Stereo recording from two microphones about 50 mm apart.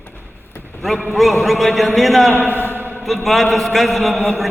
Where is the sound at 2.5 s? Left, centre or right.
Right.